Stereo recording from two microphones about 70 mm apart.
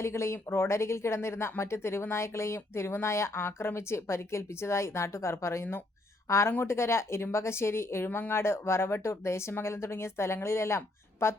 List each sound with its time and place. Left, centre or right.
0.0 s speech: left